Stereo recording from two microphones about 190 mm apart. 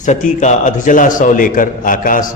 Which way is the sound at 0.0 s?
40° left (ahead or behind).